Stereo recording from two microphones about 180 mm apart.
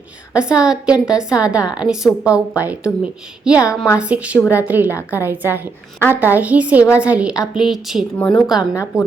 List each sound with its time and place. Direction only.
0.3 s a woman's voice: 5° right (ahead or behind)
4.9 s a woman's voice: 15° left (ahead or behind)
5.2 s a woman's voice: 10° right (ahead or behind)
8.7 s a woman's voice: 15° left (ahead or behind)